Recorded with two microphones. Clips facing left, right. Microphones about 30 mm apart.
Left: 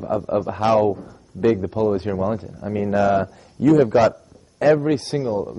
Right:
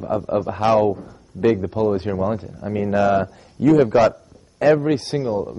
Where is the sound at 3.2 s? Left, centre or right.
Centre.